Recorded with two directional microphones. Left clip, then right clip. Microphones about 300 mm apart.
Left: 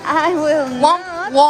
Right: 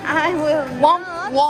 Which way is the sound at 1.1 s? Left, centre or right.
Left.